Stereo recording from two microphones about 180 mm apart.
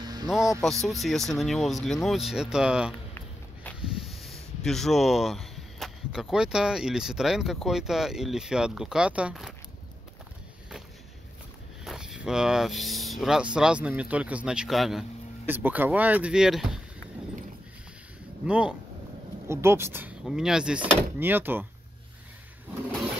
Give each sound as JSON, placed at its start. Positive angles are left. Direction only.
{"t": 0.0, "sound": "a sound", "side_deg": -20}
{"t": 0.8, "sound": "speech", "side_deg": 0}
{"t": 11.8, "sound": "speech", "side_deg": 0}
{"t": 18.4, "sound": "speech", "side_deg": -5}